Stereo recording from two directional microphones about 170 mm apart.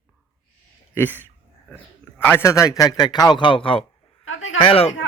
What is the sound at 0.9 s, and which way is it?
A man's voice, 10° left (ahead or behind).